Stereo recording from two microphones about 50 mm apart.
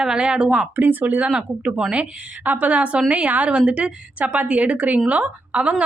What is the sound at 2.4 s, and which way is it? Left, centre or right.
A woman's voice, right.